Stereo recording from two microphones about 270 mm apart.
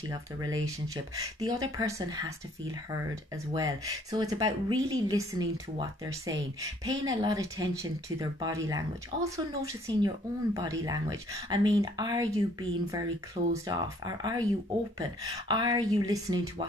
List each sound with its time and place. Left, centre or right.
0.0 s a woman's voice: centre
3.5 s a woman's voice: centre